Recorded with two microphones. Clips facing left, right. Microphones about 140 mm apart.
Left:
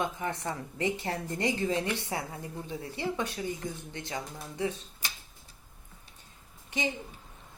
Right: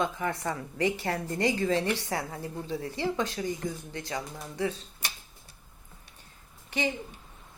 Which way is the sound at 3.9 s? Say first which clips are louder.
Right 2 dB; 25° left (ahead or behind).